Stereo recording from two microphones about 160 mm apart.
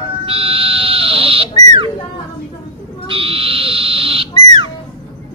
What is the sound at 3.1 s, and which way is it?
Frog, 35° right (ahead or behind).